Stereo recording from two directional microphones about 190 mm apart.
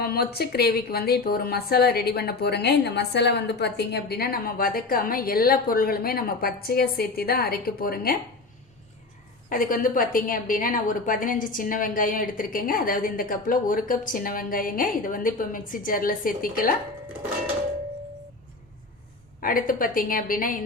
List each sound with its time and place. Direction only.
0.0 s a woman's voice: 55° left (ahead or behind)
9.5 s a woman's voice: 45° left (ahead or behind)
19.4 s a woman's voice: 45° left (ahead or behind)